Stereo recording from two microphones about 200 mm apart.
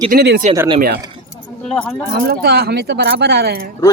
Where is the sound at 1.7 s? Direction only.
10° left (ahead or behind).